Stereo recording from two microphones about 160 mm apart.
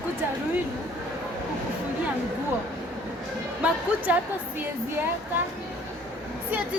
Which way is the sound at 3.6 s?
10° right (ahead or behind).